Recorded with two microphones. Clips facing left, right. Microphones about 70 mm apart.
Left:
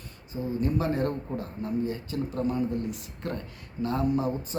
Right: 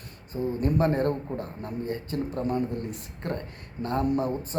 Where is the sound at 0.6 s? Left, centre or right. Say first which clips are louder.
Right 3 dB; right.